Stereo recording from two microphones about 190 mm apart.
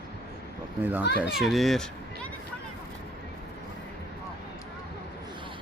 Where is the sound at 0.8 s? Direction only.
10° right (ahead or behind).